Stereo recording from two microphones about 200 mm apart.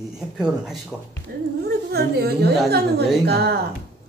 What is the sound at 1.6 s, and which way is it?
Speech, 55° right (ahead or behind).